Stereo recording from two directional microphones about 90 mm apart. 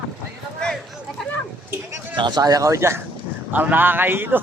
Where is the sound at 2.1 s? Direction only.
55° right (ahead or behind); by 3.0 s 30° right (ahead or behind).